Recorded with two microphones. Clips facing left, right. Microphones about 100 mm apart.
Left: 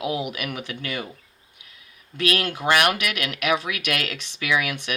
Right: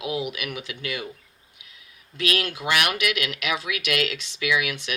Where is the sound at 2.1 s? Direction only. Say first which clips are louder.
Left 2 dB; 45° left (ahead or behind).